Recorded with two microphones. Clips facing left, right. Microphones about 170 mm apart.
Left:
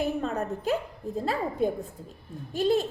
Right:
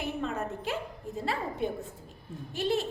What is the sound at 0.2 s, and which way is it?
A woman's voice, 40° left (ahead or behind).